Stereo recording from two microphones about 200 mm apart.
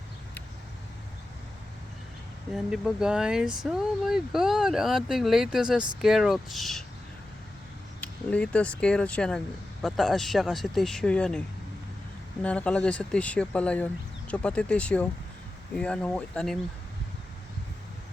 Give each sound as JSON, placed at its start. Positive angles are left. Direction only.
{"t": 2.5, "sound": "speech", "side_deg": -5}
{"t": 8.0, "sound": "speech", "side_deg": 5}